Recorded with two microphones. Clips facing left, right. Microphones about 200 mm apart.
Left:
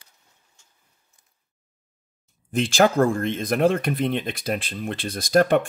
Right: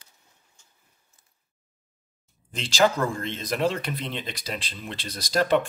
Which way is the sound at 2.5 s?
55° left (ahead or behind).